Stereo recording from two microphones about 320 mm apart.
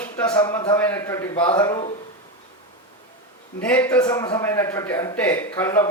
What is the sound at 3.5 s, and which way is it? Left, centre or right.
A man's voice, centre.